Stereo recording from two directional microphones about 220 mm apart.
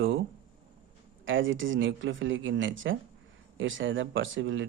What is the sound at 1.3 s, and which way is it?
Speech, 60° right (ahead or behind).